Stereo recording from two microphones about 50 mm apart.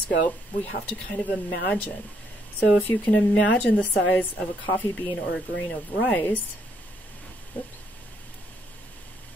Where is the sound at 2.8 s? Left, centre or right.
Left.